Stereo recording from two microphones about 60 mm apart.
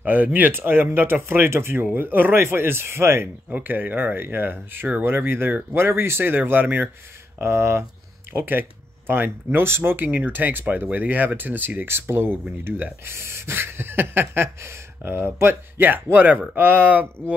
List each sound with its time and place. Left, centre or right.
0.0 s speech: right
1.9 s speech: right
3.6 s speech: right
7.3 s speech: right
8.3 s speech: right